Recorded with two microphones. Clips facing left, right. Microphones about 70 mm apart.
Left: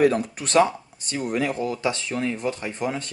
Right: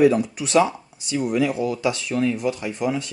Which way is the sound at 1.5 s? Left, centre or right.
Centre.